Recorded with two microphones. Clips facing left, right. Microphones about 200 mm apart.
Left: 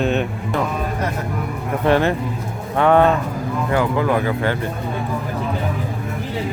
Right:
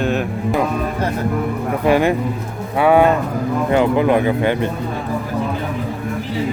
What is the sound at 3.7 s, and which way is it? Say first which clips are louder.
Speech: right 4 dB; 20° right (ahead or behind).